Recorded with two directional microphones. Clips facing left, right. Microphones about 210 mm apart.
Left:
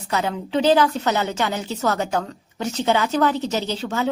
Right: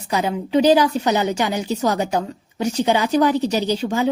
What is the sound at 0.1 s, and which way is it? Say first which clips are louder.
A woman's voice: right 4 dB; 15° right (ahead or behind).